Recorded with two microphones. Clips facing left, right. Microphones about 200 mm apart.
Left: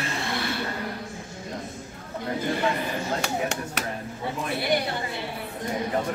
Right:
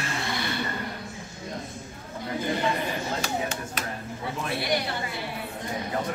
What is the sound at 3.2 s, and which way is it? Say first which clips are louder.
Speech: left 2 dB; 70° left (ahead or behind).